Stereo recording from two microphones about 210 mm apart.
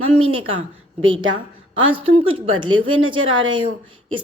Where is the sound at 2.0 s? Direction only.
25° right (ahead or behind).